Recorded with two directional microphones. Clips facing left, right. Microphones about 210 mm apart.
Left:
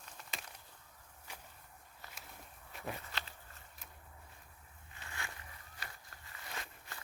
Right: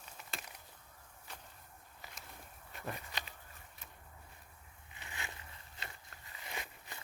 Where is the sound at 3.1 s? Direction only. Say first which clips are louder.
Even; 15° right (ahead or behind).